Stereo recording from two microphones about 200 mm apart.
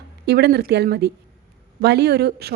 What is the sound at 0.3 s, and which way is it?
A woman's voice, 55° right (ahead or behind).